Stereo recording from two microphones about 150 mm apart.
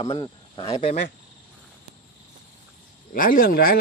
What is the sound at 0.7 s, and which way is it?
Speech, 50° left (ahead or behind).